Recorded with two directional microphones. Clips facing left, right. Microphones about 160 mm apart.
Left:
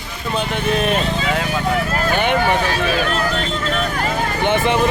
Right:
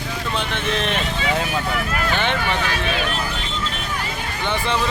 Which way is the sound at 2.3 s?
40° left (ahead or behind).